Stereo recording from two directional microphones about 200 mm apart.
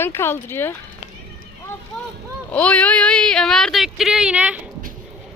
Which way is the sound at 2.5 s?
5° left (ahead or behind).